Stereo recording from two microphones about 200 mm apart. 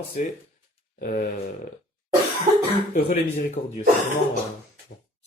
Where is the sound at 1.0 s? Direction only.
40° left (ahead or behind).